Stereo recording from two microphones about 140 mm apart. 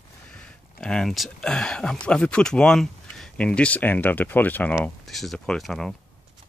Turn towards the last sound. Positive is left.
turn(degrees=5)  # may be behind; listen again after turning